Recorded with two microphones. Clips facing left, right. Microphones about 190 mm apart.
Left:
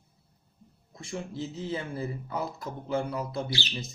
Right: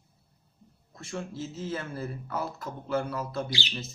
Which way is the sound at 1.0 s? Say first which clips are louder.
Left 1 dB; 15° left (ahead or behind).